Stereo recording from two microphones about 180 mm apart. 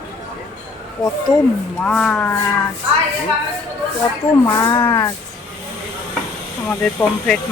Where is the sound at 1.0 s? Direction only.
20° left (ahead or behind).